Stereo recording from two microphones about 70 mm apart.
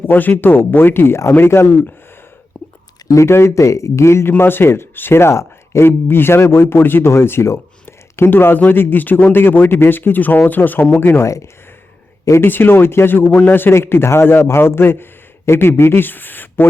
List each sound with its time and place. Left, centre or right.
0.1 s a man's voice: left
3.1 s a man's voice: left
12.2 s speech: left
12.5 s a man's voice: left